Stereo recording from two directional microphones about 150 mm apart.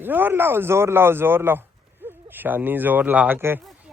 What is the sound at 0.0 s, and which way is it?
Speech, 15° right (ahead or behind).